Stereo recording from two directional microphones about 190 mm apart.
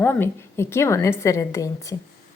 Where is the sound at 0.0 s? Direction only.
10° left (ahead or behind).